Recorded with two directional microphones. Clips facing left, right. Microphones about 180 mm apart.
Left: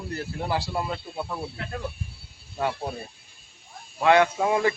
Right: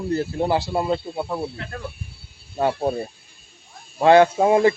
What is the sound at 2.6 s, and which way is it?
Speech, 35° right (ahead or behind).